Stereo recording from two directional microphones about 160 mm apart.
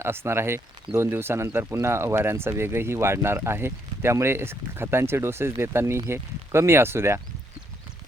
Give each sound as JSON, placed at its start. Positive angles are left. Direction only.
{"t": 0.0, "sound": "speech", "side_deg": -15}